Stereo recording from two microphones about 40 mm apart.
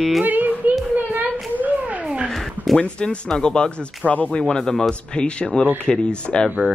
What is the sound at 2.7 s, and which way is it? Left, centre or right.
Speech, left.